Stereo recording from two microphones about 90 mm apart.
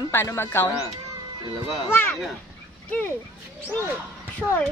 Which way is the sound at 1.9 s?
25° left (ahead or behind).